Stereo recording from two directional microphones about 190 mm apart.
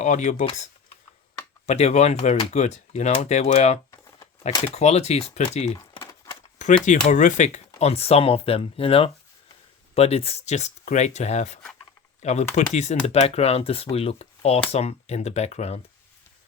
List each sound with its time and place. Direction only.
0.0 s speech: 40° left (ahead or behind)